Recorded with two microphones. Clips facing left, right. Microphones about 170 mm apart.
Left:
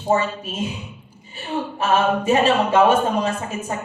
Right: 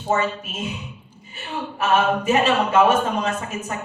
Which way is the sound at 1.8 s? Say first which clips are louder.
Even; 30° left (ahead or behind).